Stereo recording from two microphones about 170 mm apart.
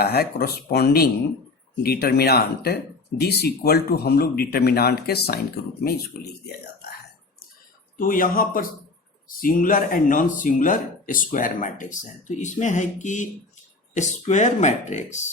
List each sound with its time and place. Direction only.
0.0 s speech: 65° left (ahead or behind)
7.9 s speech: 55° left (ahead or behind)